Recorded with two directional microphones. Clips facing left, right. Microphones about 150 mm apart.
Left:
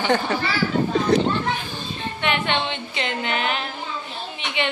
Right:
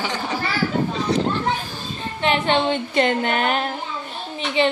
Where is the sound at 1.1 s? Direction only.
50° left (ahead or behind).